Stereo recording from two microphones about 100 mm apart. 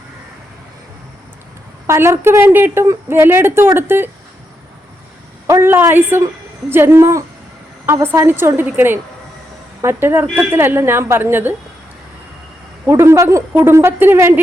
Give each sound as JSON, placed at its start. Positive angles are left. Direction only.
{"t": 1.9, "sound": "a woman's voice", "side_deg": -25}
{"t": 5.5, "sound": "a woman's voice", "side_deg": -25}
{"t": 12.8, "sound": "a woman's voice", "side_deg": -25}